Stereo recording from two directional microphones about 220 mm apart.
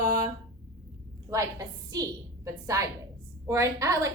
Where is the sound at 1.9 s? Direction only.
15° right (ahead or behind).